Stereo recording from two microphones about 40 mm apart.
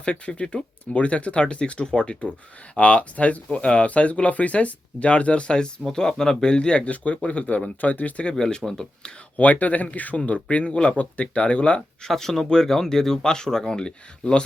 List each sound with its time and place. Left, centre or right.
0.0 s speech: left
8.2 s speech: left
9.3 s speech: left
12.0 s speech: centre